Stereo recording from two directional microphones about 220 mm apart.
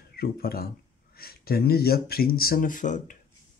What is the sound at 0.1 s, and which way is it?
Speech, 45° left (ahead or behind).